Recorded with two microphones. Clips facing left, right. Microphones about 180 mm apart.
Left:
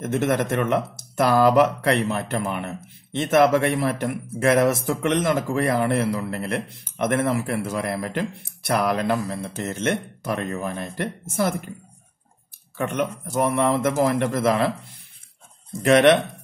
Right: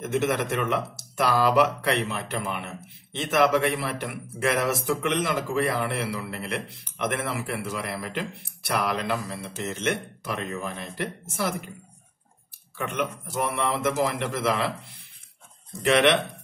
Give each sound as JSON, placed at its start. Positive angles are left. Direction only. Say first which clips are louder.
{"t": 0.0, "sound": "a man's voice", "louder": "left 3 dB", "side_deg": 50}
{"t": 12.7, "sound": "a man's voice", "louder": "left 4 dB", "side_deg": 45}
{"t": 15.8, "sound": "a man's voice", "louder": "left 5 dB", "side_deg": 45}